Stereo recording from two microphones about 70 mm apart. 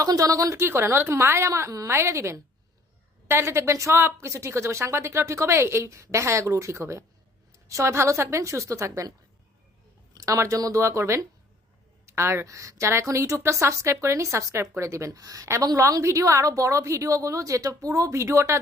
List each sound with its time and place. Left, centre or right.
0.0 s a woman's voice: right
0.6 s a woman's voice: right
10.2 s a woman's voice: right